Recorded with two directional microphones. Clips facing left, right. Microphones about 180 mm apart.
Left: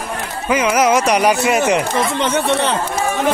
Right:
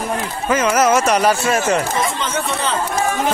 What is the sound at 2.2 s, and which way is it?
Speech, 70° left (ahead or behind).